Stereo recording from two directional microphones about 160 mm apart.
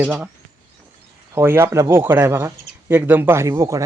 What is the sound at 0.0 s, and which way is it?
Speech, 10° right (ahead or behind).